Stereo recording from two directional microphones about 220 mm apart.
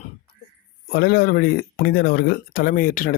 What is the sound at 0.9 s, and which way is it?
Speech, 45° left (ahead or behind).